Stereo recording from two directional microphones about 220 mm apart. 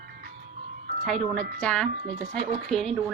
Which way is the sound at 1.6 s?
5° left (ahead or behind).